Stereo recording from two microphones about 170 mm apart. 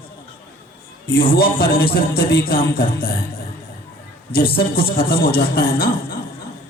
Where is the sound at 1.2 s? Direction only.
60° left (ahead or behind).